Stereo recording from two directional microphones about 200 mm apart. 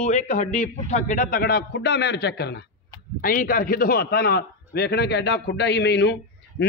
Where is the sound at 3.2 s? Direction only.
45° left (ahead or behind).